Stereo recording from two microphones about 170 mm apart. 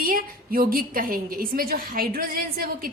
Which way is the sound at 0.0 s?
60° right (ahead or behind).